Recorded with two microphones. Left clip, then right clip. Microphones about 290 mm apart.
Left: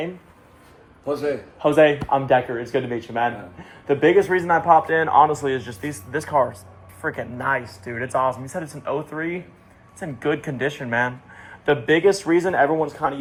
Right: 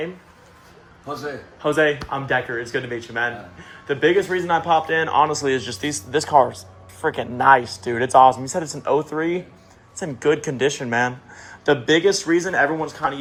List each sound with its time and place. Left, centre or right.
1.6 s speech: centre
10.0 s speech: centre